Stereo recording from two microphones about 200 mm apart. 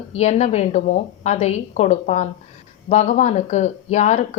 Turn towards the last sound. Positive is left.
turn(degrees=35)  # may be behind; listen again after turning